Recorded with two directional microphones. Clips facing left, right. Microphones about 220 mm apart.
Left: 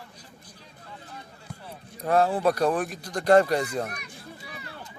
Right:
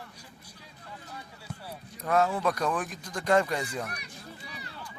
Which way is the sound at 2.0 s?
35° left (ahead or behind).